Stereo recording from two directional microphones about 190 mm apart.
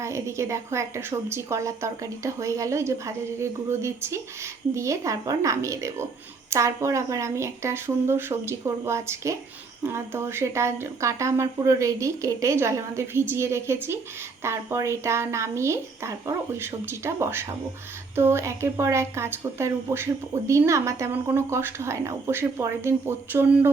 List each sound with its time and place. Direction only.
0.0 s a woman's voice: 15° right (ahead or behind)